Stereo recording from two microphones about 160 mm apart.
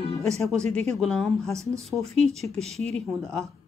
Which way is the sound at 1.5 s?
20° right (ahead or behind).